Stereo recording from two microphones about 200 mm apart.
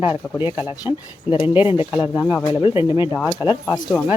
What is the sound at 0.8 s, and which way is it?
Speech, 25° left (ahead or behind).